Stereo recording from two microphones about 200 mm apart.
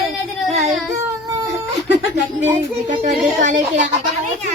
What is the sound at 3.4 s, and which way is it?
Speech, 40° right (ahead or behind).